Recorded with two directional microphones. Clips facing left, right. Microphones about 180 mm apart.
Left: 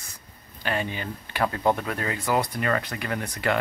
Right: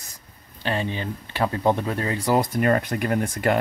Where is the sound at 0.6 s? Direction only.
25° right (ahead or behind).